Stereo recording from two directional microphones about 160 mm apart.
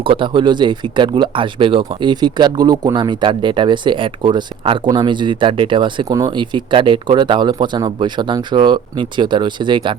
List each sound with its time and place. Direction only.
0.0 s speech: 35° right (ahead or behind)